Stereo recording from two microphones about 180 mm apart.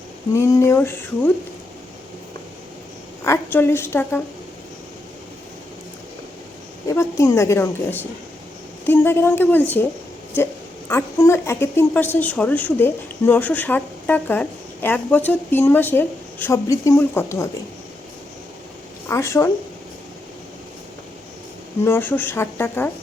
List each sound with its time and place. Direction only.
0.3 s a woman's voice: 15° left (ahead or behind)
3.2 s a woman's voice: 10° left (ahead or behind)
6.8 s a woman's voice: 15° left (ahead or behind)
19.0 s a woman's voice: 15° left (ahead or behind)
21.8 s a woman's voice: 10° left (ahead or behind)